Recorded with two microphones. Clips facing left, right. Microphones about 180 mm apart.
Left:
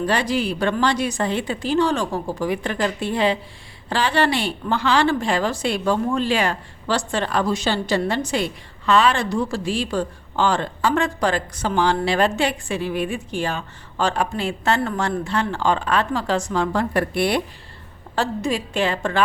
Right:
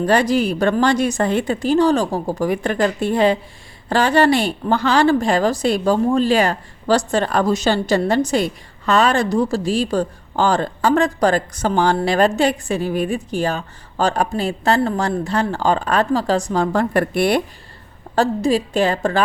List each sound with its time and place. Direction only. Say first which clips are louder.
0.0 s a woman's voice: right 5 dB; 45° right (ahead or behind)